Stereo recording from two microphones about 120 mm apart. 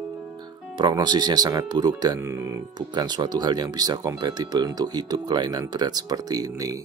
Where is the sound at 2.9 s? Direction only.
40° right (ahead or behind).